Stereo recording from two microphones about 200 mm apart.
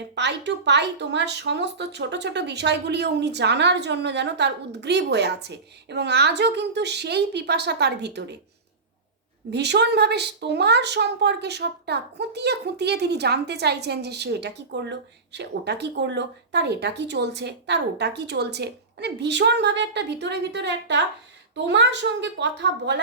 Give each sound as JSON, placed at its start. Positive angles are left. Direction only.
{"t": 0.2, "sound": "speech", "side_deg": -60}
{"t": 9.5, "sound": "speech", "side_deg": -60}